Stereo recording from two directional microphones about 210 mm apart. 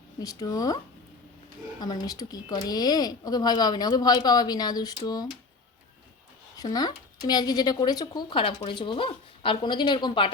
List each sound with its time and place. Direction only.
0.2 s speech: 15° left (ahead or behind)
1.8 s speech: 20° left (ahead or behind)
6.6 s speech: 20° left (ahead or behind)